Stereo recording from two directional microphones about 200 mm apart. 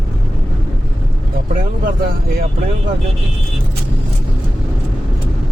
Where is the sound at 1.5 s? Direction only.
45° right (ahead or behind).